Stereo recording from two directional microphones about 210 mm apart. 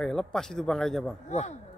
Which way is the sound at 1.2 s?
35° left (ahead or behind).